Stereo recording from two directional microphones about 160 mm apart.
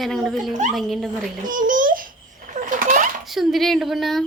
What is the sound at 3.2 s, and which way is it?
Speech, centre (ahead or behind).